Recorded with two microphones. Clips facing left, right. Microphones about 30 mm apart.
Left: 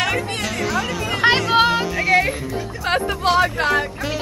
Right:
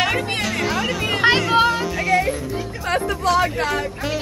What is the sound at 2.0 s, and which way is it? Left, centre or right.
Music, left.